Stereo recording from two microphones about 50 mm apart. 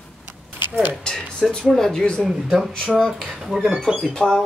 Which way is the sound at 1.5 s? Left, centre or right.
Centre.